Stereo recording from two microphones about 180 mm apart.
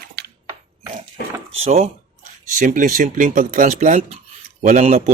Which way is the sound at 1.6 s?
35° right (ahead or behind).